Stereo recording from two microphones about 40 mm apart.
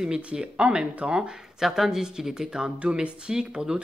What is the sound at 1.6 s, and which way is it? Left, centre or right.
Speech, centre.